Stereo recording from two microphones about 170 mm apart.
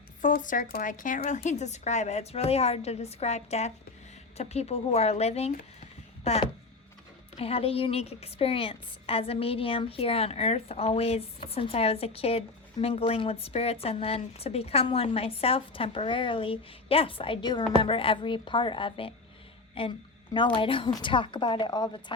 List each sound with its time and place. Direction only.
0.2 s a woman's voice: 50° left (ahead or behind); by 22.0 s 25° left (ahead or behind)